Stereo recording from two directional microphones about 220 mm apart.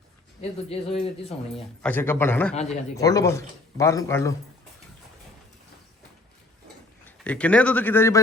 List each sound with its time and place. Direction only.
0.7 s a man's voice: 25° left (ahead or behind)
1.8 s speech: 10° left (ahead or behind)
7.0 s a man's voice: 5° left (ahead or behind)